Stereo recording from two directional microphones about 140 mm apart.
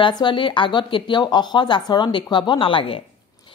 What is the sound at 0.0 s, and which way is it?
A woman's voice, 35° left (ahead or behind).